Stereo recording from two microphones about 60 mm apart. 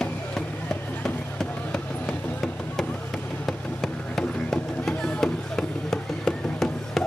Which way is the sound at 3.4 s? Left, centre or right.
Centre.